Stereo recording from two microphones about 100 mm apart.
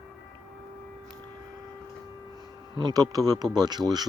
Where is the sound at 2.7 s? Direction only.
40° right (ahead or behind).